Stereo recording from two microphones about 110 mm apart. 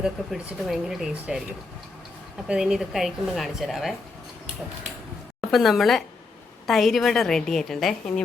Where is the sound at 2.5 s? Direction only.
5° right (ahead or behind).